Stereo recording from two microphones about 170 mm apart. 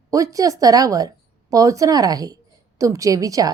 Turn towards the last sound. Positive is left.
turn(degrees=-20)  # may be behind; listen again after turning